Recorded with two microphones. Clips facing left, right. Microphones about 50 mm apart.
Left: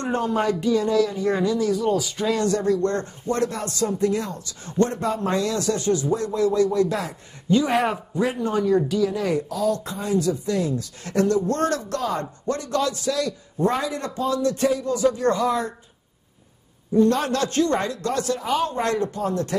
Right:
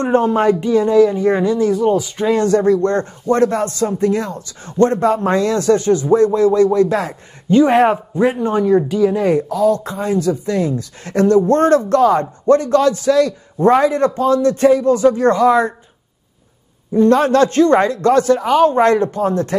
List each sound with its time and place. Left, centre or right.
0.0 s speech: right
16.9 s speech: right